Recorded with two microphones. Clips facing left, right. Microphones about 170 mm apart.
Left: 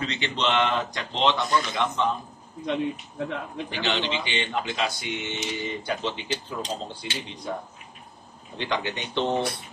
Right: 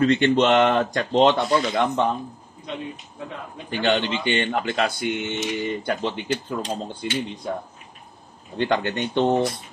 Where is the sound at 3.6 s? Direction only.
50° right (ahead or behind).